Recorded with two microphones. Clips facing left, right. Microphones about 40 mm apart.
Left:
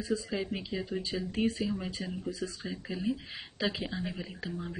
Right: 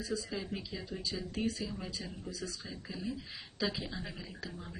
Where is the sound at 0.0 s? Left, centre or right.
Left.